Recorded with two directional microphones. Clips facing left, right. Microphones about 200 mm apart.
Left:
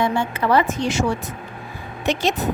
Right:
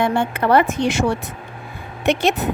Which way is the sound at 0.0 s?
55° right (ahead or behind).